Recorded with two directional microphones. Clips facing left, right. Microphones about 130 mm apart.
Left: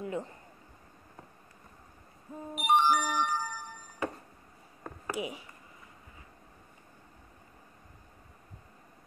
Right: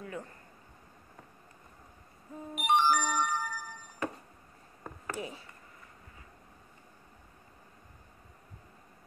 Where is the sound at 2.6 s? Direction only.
5° left (ahead or behind).